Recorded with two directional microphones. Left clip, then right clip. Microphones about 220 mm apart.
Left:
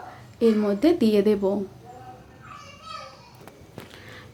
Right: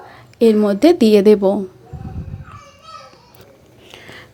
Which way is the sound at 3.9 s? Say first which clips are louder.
Right 7 dB; 25° right (ahead or behind).